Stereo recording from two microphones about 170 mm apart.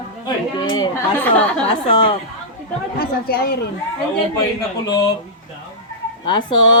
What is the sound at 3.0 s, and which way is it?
Speech, 65° left (ahead or behind).